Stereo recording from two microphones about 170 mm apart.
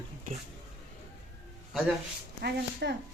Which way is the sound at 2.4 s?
80° right.